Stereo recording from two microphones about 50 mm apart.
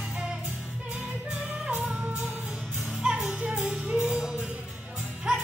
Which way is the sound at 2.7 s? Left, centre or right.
Centre.